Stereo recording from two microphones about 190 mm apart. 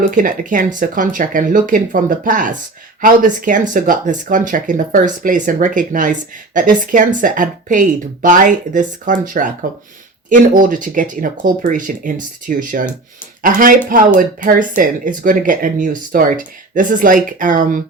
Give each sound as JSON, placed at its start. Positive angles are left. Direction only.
{"t": 0.1, "sound": "speech", "side_deg": -45}